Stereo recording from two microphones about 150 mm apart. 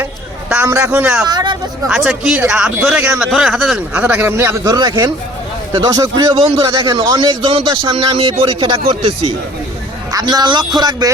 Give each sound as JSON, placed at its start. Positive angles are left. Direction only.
{"t": 0.5, "sound": "speech", "side_deg": -15}
{"t": 1.3, "sound": "speech", "side_deg": -25}
{"t": 1.9, "sound": "a man's voice", "side_deg": -5}
{"t": 10.1, "sound": "a man's voice", "side_deg": -25}